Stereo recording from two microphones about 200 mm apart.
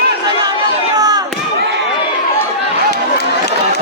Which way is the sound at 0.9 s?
20° right (ahead or behind).